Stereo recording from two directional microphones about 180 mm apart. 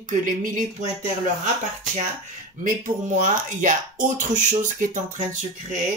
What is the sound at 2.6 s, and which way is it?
Speech, 45° right (ahead or behind).